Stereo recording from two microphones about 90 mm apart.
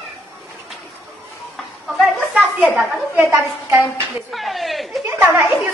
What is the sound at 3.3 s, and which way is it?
Speech, 30° right (ahead or behind).